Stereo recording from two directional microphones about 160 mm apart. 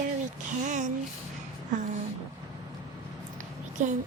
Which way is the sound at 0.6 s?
50° right (ahead or behind).